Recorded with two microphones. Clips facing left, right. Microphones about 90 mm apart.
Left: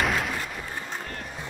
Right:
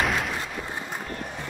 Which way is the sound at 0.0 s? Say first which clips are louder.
Even; centre (ahead or behind).